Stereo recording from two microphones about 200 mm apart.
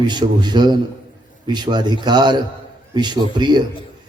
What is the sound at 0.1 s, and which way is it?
Speech, 20° right (ahead or behind).